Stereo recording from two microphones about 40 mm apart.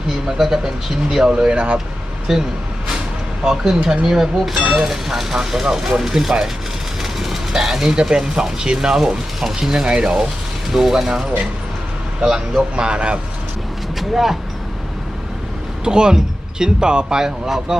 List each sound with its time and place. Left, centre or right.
0.3 s speech: centre
1.5 s speech: right
2.3 s speech: centre
7.0 s train: centre
8.1 s speech: centre
12.7 s speech: right
14.0 s speech: centre
15.8 s speech: right